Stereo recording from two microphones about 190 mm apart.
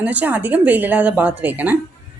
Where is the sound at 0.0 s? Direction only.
10° right (ahead or behind).